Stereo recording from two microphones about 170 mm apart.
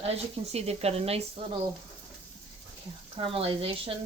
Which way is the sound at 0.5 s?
35° right (ahead or behind).